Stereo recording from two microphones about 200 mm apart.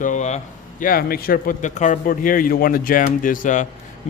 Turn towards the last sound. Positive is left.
turn(degrees=40)  # may be behind; listen again after turning